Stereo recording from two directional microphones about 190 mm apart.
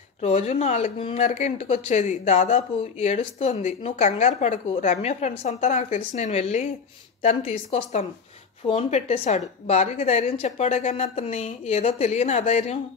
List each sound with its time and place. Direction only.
0.2 s speech: 35° left (ahead or behind)